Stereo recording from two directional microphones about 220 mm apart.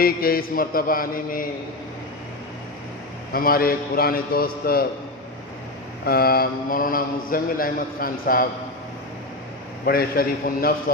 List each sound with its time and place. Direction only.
0.0 s a man's voice: 40° left (ahead or behind)
3.3 s a man's voice: 40° left (ahead or behind)
6.1 s a man's voice: 45° left (ahead or behind)
9.8 s a man's voice: 45° left (ahead or behind)